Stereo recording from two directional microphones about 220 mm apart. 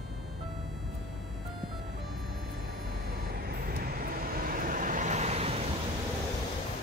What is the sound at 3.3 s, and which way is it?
Vehicle, 45° right (ahead or behind).